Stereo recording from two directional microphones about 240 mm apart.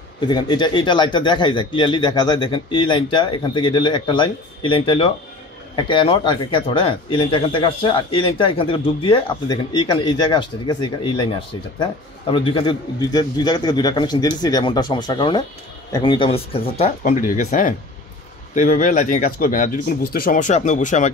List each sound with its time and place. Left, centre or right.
0.2 s a man's voice: centre